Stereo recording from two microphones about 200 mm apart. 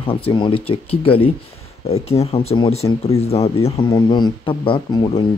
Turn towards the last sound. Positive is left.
turn(degrees=25)  # may be behind; listen again after turning